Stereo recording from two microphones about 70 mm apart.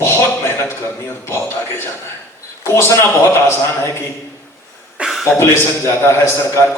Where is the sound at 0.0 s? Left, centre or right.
Left.